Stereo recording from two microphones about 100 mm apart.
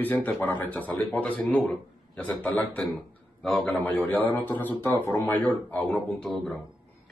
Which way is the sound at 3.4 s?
5° left (ahead or behind).